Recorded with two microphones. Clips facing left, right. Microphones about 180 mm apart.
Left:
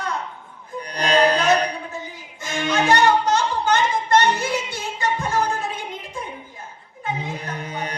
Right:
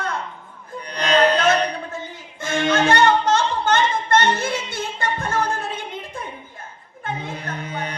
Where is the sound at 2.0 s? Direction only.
55° right (ahead or behind).